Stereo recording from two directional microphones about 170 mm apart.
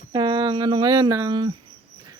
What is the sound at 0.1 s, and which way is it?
Speech, 25° right (ahead or behind).